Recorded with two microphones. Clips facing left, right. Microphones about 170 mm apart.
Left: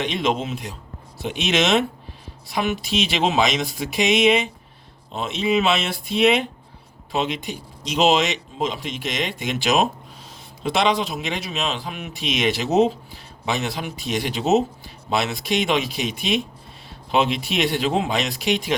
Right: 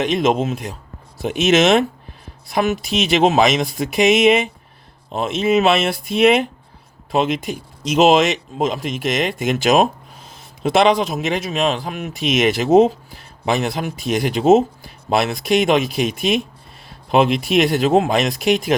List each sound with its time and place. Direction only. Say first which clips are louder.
0.0 s speech: right 6 dB; 45° right (ahead or behind)